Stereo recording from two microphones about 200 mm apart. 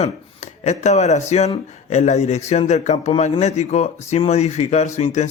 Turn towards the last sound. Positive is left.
turn(degrees=35)  # may be behind; listen again after turning